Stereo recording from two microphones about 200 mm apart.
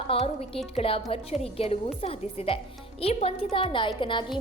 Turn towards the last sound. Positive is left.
turn(degrees=25)  # may be behind; listen again after turning